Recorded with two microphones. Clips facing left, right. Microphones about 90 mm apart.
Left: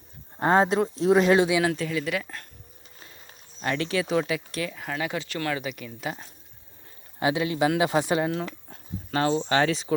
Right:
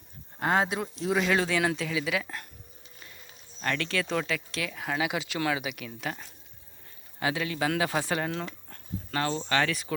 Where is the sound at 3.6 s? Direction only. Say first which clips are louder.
Left 3 dB; 10° left (ahead or behind).